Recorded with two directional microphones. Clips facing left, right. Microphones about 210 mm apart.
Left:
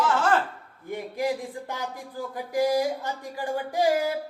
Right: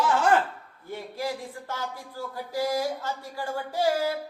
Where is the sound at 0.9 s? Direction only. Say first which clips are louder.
Left 4 dB; 15° left (ahead or behind).